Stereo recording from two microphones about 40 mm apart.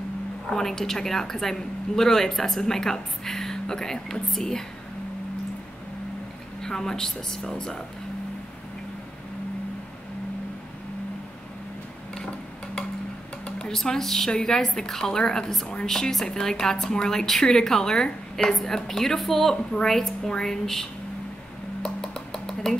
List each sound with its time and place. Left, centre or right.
0.5 s a woman's voice: centre
6.6 s a woman's voice: centre
13.6 s a woman's voice: centre
18.9 s a woman's voice: centre
19.5 s a woman's voice: centre
21.8 s a sound: centre